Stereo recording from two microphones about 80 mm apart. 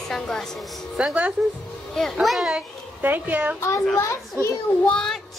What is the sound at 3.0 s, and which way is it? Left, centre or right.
Speech, right.